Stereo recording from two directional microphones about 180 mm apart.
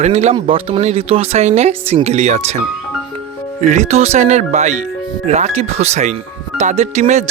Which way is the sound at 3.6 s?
40° right (ahead or behind).